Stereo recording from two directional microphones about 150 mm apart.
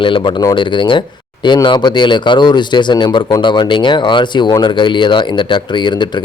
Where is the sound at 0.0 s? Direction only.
30° left (ahead or behind).